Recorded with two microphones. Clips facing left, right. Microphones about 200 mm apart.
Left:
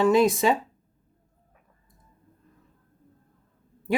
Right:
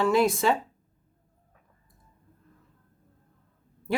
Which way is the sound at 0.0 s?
20° left (ahead or behind).